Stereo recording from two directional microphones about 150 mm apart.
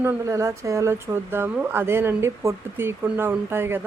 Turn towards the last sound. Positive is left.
turn(degrees=-15)  # may be behind; listen again after turning